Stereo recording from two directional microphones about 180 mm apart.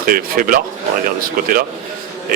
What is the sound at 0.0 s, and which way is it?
Speech, 50° right (ahead or behind).